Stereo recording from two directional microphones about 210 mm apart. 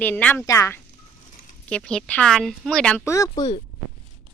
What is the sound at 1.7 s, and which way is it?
Speech, 5° left (ahead or behind).